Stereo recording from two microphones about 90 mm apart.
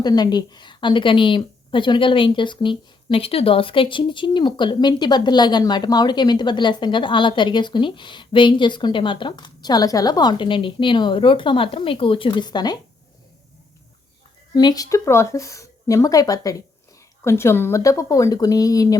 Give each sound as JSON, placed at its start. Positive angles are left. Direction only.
{"t": 0.0, "sound": "a woman's voice", "side_deg": 50}
{"t": 14.5, "sound": "speech", "side_deg": 45}
{"t": 14.8, "sound": "speech", "side_deg": 35}
{"t": 17.2, "sound": "speech", "side_deg": 30}